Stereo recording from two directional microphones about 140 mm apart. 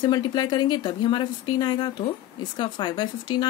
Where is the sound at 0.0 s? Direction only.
30° left (ahead or behind).